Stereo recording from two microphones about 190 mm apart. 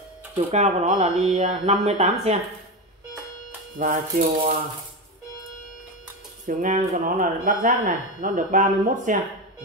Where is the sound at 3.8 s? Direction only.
45° right (ahead or behind).